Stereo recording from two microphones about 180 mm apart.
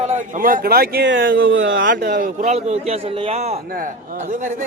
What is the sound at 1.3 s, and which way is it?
Speech, 90° right.